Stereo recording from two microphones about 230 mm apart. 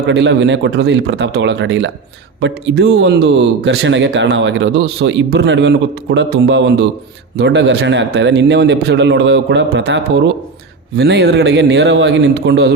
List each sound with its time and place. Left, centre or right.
0.1 s speech: right